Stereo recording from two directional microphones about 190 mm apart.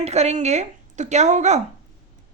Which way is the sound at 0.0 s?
35° right (ahead or behind).